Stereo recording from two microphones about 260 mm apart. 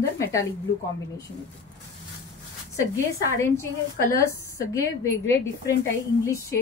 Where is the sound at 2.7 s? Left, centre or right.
Centre.